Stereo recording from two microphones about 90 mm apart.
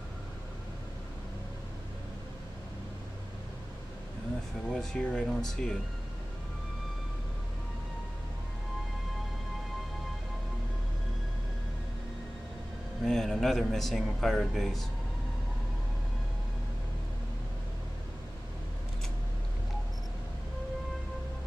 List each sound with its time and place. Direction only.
4.6 s a man's voice: 5° left (ahead or behind)
13.0 s a man's voice: centre (ahead or behind)